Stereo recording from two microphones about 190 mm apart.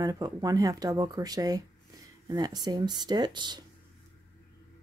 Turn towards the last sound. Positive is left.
turn(degrees=-25)  # may be behind; listen again after turning